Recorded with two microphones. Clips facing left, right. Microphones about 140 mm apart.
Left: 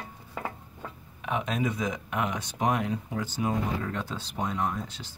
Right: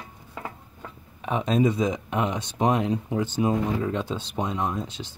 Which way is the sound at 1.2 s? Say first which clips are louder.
Right 7 dB; 30° right (ahead or behind).